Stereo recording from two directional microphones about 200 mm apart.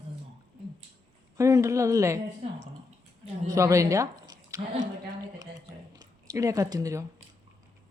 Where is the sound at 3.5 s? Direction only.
15° right (ahead or behind).